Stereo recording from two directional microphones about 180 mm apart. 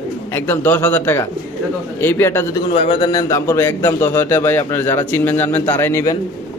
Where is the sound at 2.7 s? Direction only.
30° left (ahead or behind).